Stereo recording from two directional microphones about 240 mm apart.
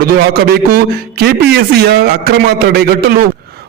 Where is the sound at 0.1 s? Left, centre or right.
Right.